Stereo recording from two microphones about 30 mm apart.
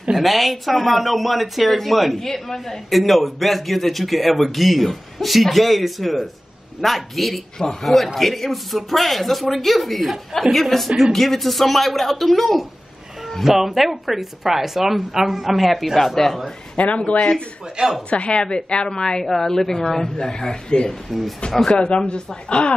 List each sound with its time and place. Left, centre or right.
0.1 s speech: centre
2.1 s a woman's voice: centre
13.4 s a woman's voice: centre
16.7 s speech: left
17.8 s speech: right
18.1 s a woman's voice: left
19.2 s a woman's voice: centre
20.2 s a woman's voice: left